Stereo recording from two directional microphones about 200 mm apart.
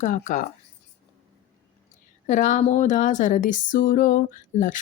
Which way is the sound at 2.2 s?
40° left (ahead or behind).